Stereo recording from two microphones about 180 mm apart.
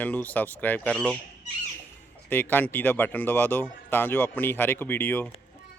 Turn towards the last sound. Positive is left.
turn(degrees=10)  # may be behind; listen again after turning